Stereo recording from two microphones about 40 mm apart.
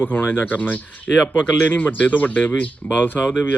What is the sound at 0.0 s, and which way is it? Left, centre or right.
Speech, left.